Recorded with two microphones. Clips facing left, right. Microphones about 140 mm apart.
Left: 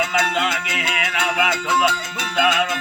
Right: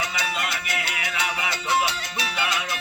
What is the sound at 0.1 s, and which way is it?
Music, 90° left.